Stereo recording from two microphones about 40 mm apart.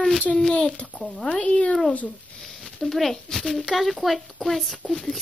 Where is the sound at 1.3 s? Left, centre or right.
Left.